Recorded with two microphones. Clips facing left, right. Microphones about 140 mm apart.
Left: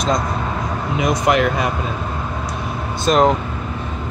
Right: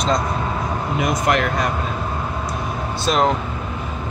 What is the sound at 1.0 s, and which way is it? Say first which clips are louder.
Speech: left 4 dB; centre (ahead or behind).